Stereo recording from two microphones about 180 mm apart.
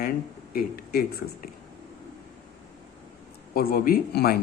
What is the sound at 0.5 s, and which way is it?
Speech, 60° left (ahead or behind).